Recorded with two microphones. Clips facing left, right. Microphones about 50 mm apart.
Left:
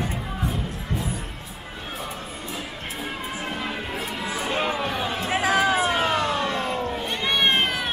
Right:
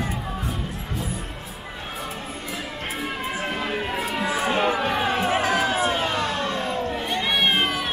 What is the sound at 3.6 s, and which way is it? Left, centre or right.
Music, centre.